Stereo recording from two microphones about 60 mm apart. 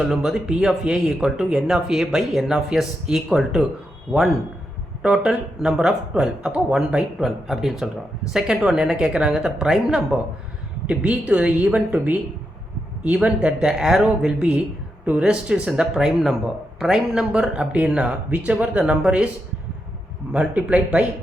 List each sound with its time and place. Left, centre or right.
0.0 s speech: centre
4.1 s a woman's voice: right
10.8 s a woman's voice: right
13.7 s speech: centre
20.3 s a woman's voice: right